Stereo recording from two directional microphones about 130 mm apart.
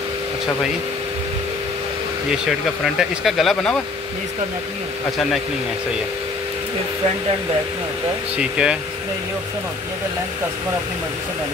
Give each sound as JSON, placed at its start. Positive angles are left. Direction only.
{"t": 2.3, "sound": "speech", "side_deg": 0}
{"t": 8.4, "sound": "speech", "side_deg": -5}